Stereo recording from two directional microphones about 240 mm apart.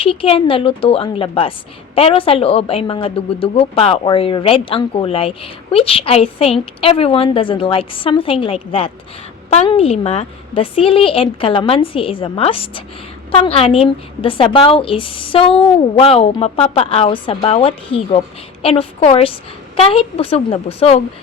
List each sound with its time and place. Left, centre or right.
0.0 s a woman's voice: left